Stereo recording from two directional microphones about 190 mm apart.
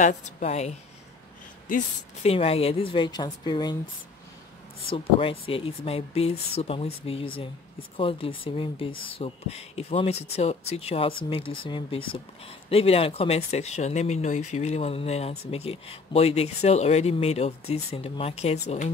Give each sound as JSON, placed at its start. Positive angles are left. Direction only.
{"t": 0.0, "sound": "speech", "side_deg": 40}
{"t": 2.2, "sound": "a woman's voice", "side_deg": 30}
{"t": 4.8, "sound": "a woman's voice", "side_deg": 30}